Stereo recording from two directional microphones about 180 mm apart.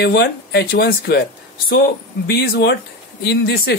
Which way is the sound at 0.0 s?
65° left (ahead or behind).